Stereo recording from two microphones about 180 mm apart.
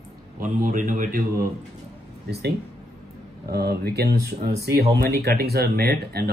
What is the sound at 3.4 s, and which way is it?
Speech, 60° right (ahead or behind).